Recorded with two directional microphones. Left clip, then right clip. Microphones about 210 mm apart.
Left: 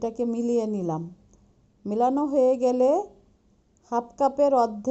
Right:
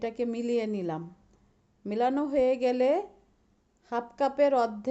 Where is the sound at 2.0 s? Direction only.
30° right (ahead or behind).